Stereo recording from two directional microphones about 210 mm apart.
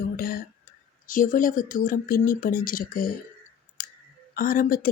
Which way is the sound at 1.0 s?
40° left (ahead or behind).